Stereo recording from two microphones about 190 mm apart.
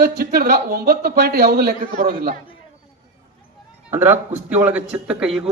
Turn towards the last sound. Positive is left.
turn(degrees=-5)  # may be behind; listen again after turning